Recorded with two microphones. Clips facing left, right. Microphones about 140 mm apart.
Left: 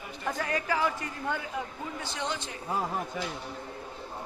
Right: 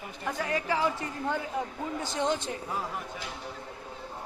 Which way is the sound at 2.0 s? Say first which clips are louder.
Right 6 dB; 45° right (ahead or behind).